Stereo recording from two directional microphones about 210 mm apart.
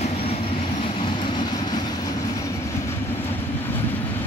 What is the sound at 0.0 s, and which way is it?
Vehicle, 30° left (ahead or behind).